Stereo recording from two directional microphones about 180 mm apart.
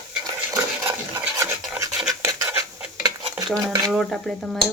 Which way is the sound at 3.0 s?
20° right (ahead or behind).